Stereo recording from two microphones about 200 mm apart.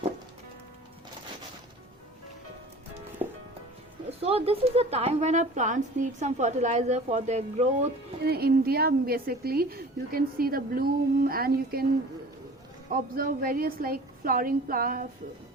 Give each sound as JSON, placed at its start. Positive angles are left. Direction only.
{"t": 3.2, "sound": "music", "side_deg": -35}
{"t": 4.2, "sound": "a woman's voice", "side_deg": -30}
{"t": 8.2, "sound": "a woman's voice", "side_deg": -50}
{"t": 12.9, "sound": "a woman's voice", "side_deg": -45}